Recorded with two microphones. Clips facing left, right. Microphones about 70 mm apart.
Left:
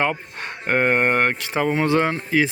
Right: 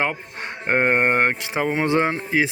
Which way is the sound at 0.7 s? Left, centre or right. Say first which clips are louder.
Even; right.